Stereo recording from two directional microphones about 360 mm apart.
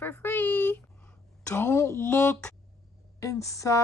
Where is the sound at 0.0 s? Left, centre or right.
Centre.